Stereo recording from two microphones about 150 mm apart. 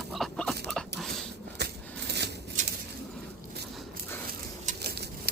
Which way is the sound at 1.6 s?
90° right.